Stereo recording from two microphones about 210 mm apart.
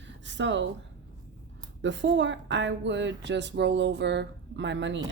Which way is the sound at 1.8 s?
60° right (ahead or behind).